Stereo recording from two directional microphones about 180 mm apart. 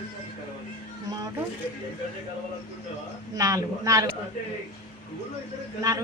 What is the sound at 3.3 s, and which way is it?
Speech, 20° right (ahead or behind).